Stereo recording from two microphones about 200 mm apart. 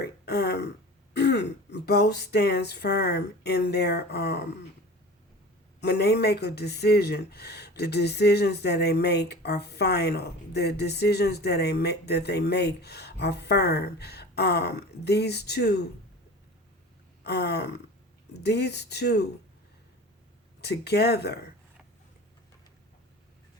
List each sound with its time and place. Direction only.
0.0 s throat clearing: 55° left (ahead or behind)
1.1 s speech: 60° left (ahead or behind)
5.8 s speech: 55° left (ahead or behind)
17.2 s speech: 55° left (ahead or behind)
20.6 s speech: 55° left (ahead or behind)